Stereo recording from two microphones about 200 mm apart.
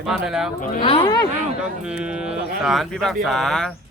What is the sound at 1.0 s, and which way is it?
Speech, 20° left (ahead or behind).